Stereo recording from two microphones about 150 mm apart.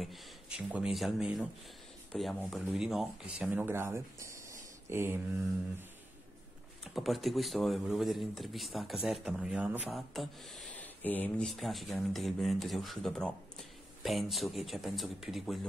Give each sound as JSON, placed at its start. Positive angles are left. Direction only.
{"t": 0.0, "sound": "speech", "side_deg": 0}
{"t": 4.8, "sound": "mantra", "side_deg": -15}
{"t": 6.8, "sound": "speech", "side_deg": 0}
{"t": 9.9, "sound": "speech", "side_deg": 0}